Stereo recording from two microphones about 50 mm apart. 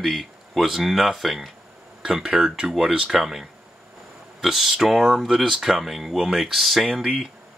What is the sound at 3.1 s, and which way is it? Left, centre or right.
Speech, centre.